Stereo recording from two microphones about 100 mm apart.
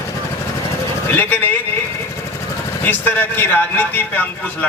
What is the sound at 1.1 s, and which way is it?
Speech, 20° left (ahead or behind).